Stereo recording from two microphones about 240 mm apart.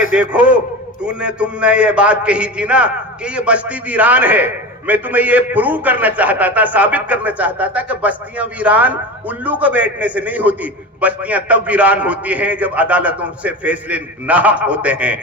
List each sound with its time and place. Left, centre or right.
0.1 s a man's voice: centre